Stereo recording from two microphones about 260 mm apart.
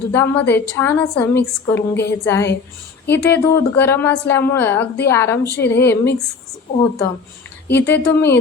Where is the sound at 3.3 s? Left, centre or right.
Centre.